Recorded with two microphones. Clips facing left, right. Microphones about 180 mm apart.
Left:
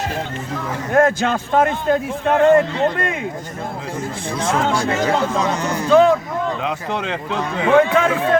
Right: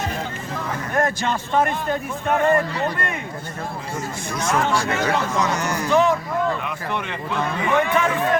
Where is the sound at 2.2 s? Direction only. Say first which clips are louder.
Left 6 dB; 90° left.